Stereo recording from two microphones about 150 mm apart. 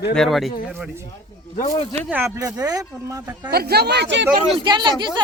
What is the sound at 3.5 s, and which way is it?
Speech, 90° right.